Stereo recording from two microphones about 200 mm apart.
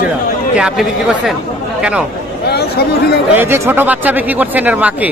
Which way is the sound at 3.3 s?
10° right (ahead or behind).